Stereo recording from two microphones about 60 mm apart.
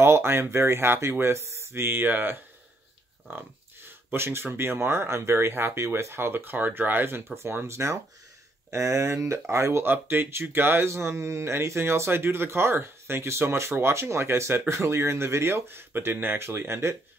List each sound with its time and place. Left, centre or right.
0.0 s speech: right
4.1 s speech: right